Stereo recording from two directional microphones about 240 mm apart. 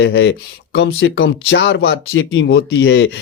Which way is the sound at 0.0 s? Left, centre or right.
Left.